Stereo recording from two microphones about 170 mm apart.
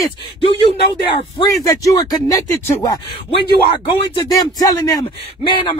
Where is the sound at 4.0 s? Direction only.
25° left (ahead or behind).